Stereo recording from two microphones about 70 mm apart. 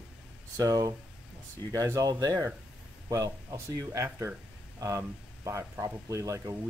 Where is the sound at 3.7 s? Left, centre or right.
Right.